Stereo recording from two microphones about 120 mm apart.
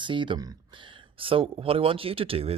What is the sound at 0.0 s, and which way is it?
Speech, 40° right (ahead or behind).